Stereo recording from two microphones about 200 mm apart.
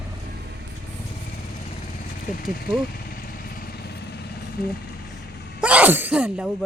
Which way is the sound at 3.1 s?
50° left (ahead or behind).